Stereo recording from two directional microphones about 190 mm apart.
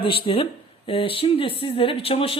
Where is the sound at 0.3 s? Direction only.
30° left (ahead or behind).